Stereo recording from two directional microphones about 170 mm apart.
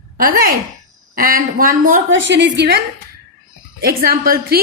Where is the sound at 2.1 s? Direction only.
90° right.